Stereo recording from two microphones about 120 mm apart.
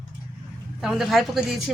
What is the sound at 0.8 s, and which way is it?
Speech, 5° right (ahead or behind).